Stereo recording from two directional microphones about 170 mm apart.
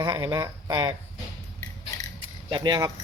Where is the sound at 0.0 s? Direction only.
25° right (ahead or behind).